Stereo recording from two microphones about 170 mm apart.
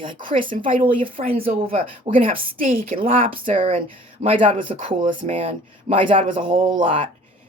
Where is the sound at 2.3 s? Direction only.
50° right (ahead or behind).